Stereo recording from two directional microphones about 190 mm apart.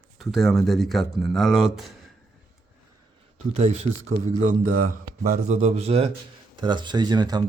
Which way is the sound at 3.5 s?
35° right (ahead or behind).